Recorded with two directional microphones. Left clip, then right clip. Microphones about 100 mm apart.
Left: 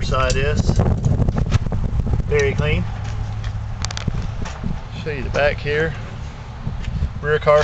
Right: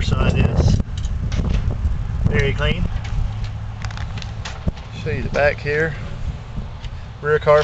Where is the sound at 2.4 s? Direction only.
Centre (ahead or behind).